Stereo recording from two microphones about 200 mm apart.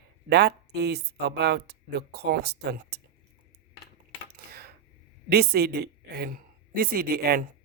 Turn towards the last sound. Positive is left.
turn(degrees=-50)  # may be behind; listen again after turning